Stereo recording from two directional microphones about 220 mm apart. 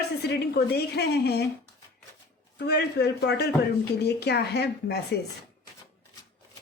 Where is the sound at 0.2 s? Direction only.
50° left (ahead or behind).